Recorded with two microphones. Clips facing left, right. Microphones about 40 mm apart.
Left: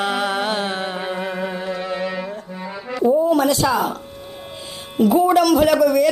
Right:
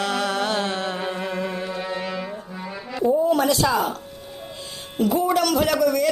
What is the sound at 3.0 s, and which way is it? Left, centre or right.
Music, centre.